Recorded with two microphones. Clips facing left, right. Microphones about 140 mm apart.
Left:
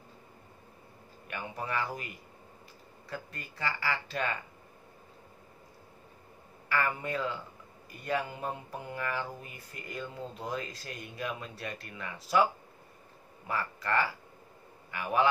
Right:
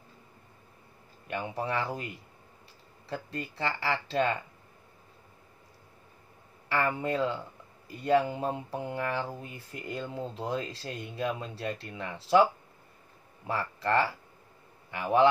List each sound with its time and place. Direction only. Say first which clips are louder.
1.2 s speech: right 5 dB; 30° right (ahead or behind)
3.1 s speech: right 6 dB; 25° right (ahead or behind)
6.7 s speech: right 3 dB; 30° right (ahead or behind)
13.5 s speech: right 3 dB; 30° right (ahead or behind)